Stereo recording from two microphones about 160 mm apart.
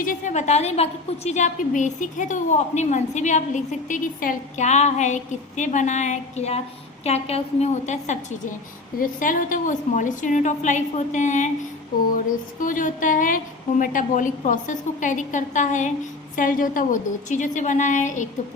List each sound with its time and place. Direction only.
0.0 s a woman's voice: 55° left (ahead or behind)
12.5 s a woman's voice: 55° left (ahead or behind)